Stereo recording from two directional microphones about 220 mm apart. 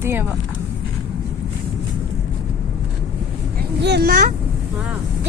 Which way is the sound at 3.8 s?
50° right (ahead or behind).